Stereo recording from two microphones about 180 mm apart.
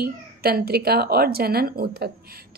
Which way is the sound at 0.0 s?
60° right (ahead or behind).